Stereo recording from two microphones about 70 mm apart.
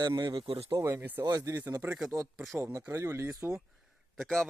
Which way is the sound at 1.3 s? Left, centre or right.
Right.